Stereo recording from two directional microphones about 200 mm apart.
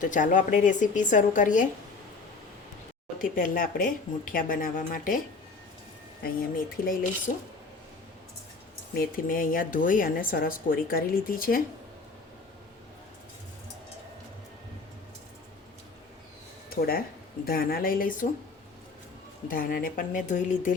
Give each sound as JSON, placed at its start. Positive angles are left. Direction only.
{"t": 0.0, "sound": "a woman's voice", "side_deg": 40}
{"t": 3.2, "sound": "speech", "side_deg": 45}
{"t": 6.8, "sound": "a woman's voice", "side_deg": 40}
{"t": 9.0, "sound": "speech", "side_deg": 45}
{"t": 16.6, "sound": "speech", "side_deg": 50}
{"t": 19.5, "sound": "speech", "side_deg": 45}